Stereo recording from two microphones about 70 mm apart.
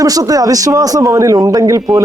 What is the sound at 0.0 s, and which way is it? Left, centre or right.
A man's voice, right.